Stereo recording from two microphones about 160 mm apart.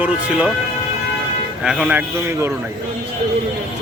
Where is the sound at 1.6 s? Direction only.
5° right (ahead or behind).